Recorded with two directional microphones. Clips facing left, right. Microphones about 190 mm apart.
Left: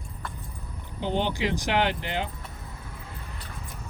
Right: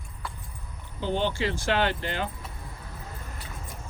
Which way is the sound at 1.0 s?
15° left (ahead or behind).